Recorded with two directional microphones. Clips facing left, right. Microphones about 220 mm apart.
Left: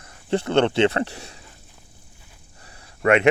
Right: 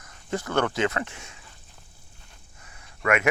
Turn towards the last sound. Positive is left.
turn(degrees=30)  # may be behind; listen again after turning